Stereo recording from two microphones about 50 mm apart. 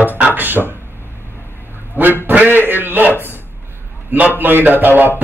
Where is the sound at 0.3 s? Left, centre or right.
Right.